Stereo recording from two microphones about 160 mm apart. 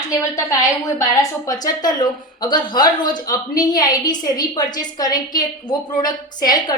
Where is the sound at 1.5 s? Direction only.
25° left (ahead or behind).